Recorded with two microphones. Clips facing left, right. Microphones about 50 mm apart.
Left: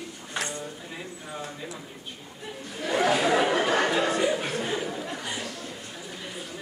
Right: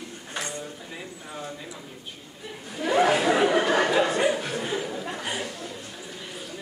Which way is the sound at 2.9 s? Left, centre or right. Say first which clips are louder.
Right 3 dB; right.